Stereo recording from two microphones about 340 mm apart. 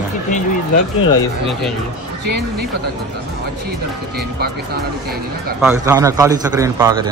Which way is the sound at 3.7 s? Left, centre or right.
Right.